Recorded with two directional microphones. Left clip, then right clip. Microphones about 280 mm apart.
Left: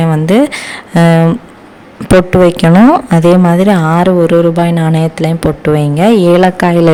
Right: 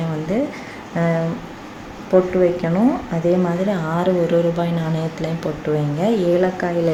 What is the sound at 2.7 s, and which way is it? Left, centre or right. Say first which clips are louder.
Speech: left 13 dB; left.